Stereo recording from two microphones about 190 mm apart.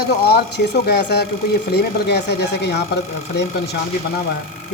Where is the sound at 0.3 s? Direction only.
60° left (ahead or behind).